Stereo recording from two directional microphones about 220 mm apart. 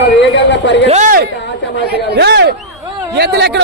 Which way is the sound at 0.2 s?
55° left (ahead or behind).